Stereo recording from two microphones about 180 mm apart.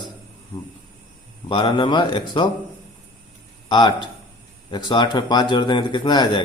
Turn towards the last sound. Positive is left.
turn(degrees=25)  # may be behind; listen again after turning